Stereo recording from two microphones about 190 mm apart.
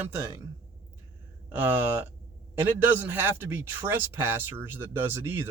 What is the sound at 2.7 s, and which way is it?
Speech, 10° right (ahead or behind).